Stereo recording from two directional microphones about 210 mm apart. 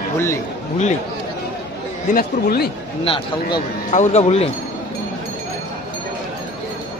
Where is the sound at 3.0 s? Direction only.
25° left (ahead or behind).